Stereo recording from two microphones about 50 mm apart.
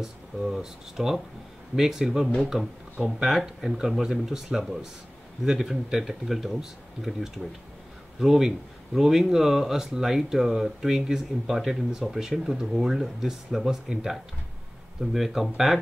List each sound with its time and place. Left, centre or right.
0.0 s speech: centre
8.2 s speech: centre